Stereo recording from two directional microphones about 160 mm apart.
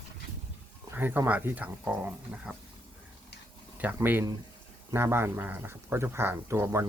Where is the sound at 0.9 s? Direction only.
10° right (ahead or behind).